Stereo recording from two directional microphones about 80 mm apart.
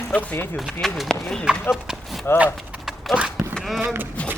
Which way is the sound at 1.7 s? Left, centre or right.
Centre.